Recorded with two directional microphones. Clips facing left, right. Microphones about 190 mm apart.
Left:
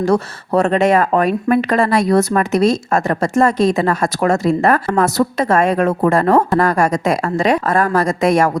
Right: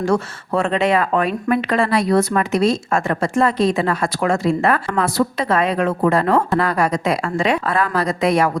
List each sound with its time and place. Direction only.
0.0 s speech: 40° left (ahead or behind)